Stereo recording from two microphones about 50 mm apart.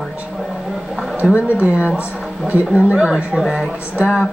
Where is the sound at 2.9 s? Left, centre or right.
Centre.